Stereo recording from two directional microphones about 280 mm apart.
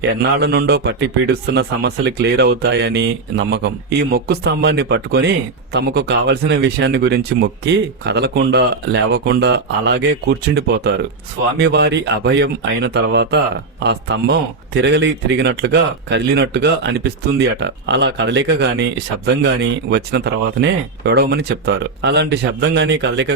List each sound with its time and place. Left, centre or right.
0.1 s a man's voice: right